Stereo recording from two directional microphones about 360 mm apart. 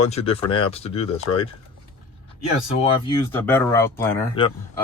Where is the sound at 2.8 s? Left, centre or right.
Centre.